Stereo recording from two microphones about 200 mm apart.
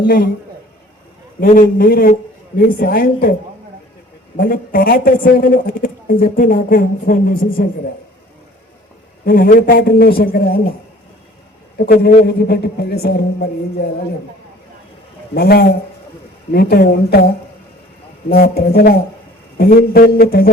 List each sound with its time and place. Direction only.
1.4 s a man's voice: 45° left (ahead or behind)
4.4 s a man's voice: 45° left (ahead or behind)
9.2 s a man's voice: 50° left (ahead or behind)
11.8 s a man's voice: 50° left (ahead or behind)
15.4 s a man's voice: 50° left (ahead or behind)